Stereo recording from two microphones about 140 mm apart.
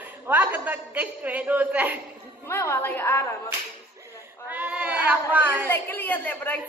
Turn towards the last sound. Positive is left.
turn(degrees=10)  # may be behind; listen again after turning